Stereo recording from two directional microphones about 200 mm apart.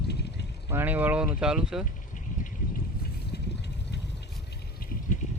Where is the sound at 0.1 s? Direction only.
55° left (ahead or behind).